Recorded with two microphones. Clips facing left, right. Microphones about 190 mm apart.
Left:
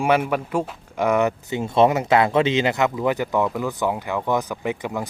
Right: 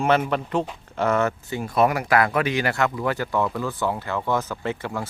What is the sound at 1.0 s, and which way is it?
Speech, 15° left (ahead or behind).